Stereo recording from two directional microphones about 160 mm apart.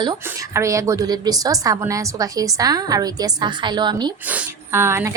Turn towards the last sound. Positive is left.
turn(degrees=-15)  # may be behind; listen again after turning